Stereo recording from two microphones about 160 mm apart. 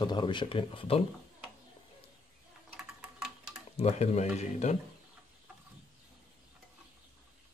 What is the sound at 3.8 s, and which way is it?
Stir, 45° left (ahead or behind).